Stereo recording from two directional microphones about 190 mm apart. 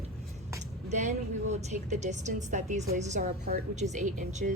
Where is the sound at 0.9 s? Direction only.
40° right (ahead or behind).